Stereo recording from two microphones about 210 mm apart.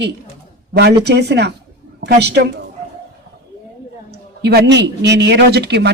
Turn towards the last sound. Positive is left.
turn(degrees=-50)  # may be behind; listen again after turning